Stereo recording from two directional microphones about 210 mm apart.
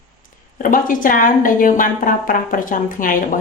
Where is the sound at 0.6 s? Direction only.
40° left (ahead or behind).